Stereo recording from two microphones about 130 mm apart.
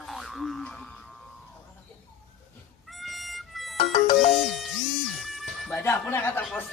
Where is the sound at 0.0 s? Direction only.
Centre (ahead or behind).